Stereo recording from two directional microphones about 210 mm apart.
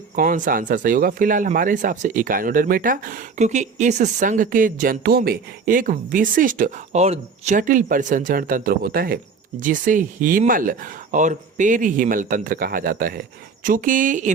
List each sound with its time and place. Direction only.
0.2 s speech: 40° right (ahead or behind)